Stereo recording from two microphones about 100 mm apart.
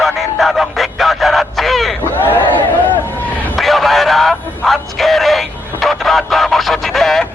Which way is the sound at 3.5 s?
Centre (ahead or behind).